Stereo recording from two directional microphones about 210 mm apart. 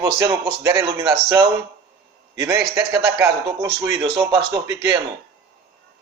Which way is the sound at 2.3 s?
15° right (ahead or behind).